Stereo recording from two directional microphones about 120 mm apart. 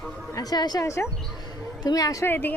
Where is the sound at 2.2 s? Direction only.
15° left (ahead or behind).